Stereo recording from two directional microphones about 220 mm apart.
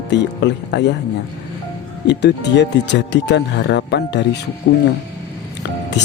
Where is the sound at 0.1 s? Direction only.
50° left (ahead or behind).